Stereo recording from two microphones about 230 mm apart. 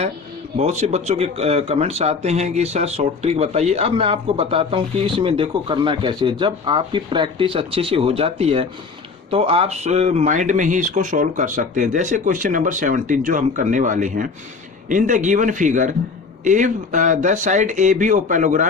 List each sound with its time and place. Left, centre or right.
0.5 s speech: right